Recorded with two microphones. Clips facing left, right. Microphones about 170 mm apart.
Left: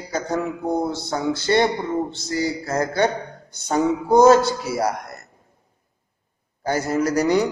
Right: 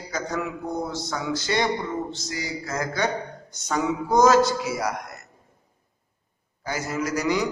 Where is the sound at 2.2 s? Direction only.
30° left (ahead or behind).